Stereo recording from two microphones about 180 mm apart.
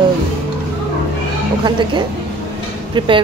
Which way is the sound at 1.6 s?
25° right (ahead or behind).